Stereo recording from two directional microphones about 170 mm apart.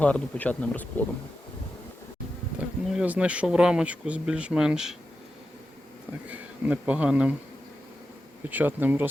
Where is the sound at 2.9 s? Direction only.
5° right (ahead or behind).